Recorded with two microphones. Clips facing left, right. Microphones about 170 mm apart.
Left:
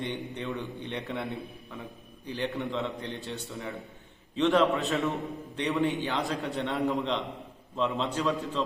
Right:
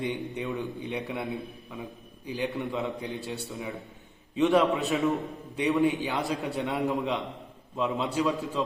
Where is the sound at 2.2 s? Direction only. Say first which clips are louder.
Right 1 dB; 15° right (ahead or behind).